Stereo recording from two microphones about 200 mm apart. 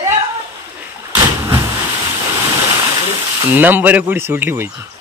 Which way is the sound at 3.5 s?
10° right (ahead or behind).